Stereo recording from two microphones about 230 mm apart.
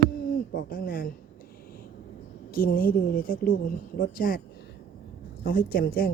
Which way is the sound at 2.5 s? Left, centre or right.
Left.